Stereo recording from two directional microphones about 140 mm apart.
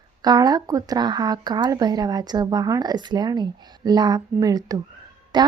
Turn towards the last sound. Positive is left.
turn(degrees=-30)  # may be behind; listen again after turning